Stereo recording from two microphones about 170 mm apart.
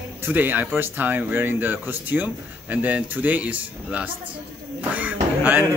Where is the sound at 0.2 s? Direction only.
10° right (ahead or behind).